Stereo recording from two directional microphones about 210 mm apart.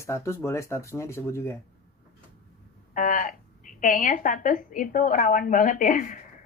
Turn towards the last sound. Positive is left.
turn(degrees=40)  # may be behind; listen again after turning